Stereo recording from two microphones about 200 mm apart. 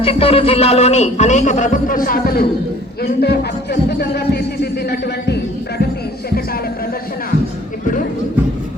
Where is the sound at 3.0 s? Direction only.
55° left (ahead or behind).